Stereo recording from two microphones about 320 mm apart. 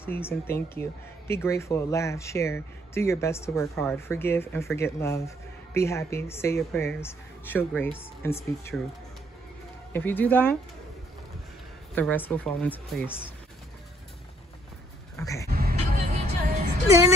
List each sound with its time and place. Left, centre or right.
0.0 s speech: centre
9.9 s speech: centre
11.9 s speech: centre
15.1 s a sound: centre
15.5 s music: right